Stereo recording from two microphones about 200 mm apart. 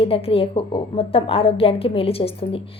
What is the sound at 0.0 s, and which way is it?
A woman's voice, 30° left (ahead or behind).